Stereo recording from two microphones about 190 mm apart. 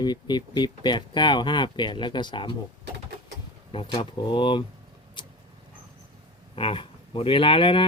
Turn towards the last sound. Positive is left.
turn(degrees=25)  # may be behind; listen again after turning